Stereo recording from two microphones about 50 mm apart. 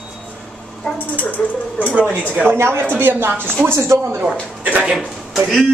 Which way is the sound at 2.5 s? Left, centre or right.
Right.